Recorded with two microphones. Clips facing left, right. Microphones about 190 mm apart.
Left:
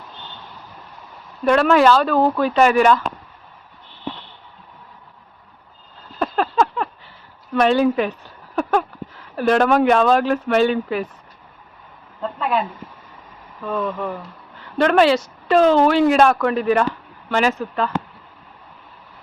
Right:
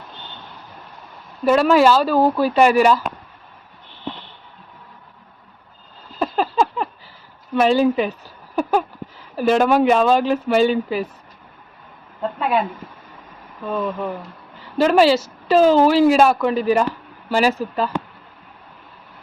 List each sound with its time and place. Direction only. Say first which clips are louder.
1.5 s a woman's voice: even; 5° right (ahead or behind)
6.1 s a sound: even; 5° right (ahead or behind)
7.5 s speech: even; 5° right (ahead or behind)
12.4 s speech: right 1 dB; 15° right (ahead or behind)
13.7 s a woman's voice: even; centre (ahead or behind)
17.2 s speech: right 1 dB; 35° right (ahead or behind)
17.5 s speech: right 1 dB; 5° right (ahead or behind)